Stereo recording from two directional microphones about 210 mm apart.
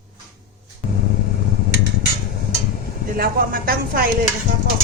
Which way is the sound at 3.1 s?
45° right (ahead or behind).